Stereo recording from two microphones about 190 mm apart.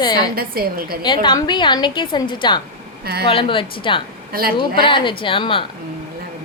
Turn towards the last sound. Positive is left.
turn(degrees=25)  # may be behind; listen again after turning